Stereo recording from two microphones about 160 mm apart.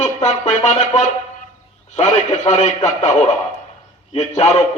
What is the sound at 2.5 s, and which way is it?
Speech, 45° left (ahead or behind).